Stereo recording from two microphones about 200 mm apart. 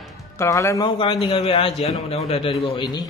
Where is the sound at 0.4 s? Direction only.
15° left (ahead or behind).